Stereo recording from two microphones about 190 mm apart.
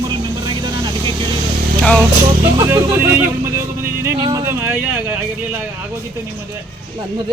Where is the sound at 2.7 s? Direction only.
10° right (ahead or behind).